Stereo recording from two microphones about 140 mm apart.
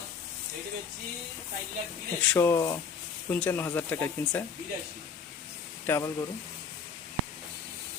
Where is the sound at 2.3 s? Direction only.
20° left (ahead or behind).